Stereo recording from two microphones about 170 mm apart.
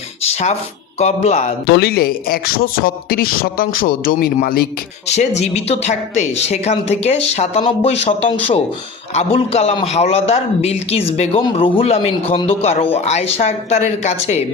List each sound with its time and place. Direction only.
0.3 s a sound: 40° left (ahead or behind)
0.9 s a man's voice: 40° left (ahead or behind)
1.7 s speech: 65° left (ahead or behind)
5.0 s a man's voice: 40° left (ahead or behind)